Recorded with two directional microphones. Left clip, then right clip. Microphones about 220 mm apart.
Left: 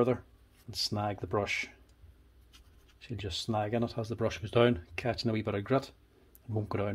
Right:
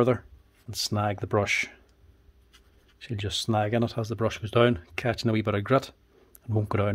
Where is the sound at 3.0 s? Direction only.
35° right (ahead or behind).